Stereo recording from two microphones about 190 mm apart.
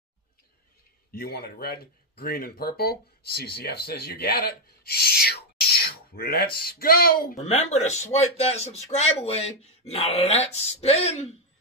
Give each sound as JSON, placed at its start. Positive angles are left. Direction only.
{"t": 1.1, "sound": "speech", "side_deg": 55}
{"t": 7.4, "sound": "speech", "side_deg": 35}